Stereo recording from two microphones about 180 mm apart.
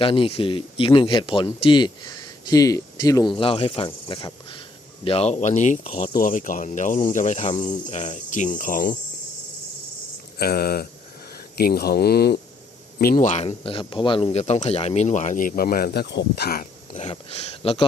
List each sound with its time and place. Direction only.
0.0 s speech: 30° left (ahead or behind)
6.1 s speech: 50° left (ahead or behind)
10.3 s speech: 60° left (ahead or behind)
13.2 s speech: 40° left (ahead or behind); by 16.6 s 60° left (ahead or behind)
16.9 s speech: 30° left (ahead or behind)